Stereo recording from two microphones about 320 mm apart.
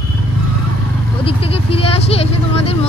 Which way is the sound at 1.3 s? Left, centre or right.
Centre.